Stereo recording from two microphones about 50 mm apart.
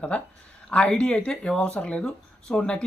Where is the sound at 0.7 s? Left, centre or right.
Centre.